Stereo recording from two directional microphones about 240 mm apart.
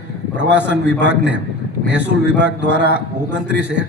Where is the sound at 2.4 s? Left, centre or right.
Right.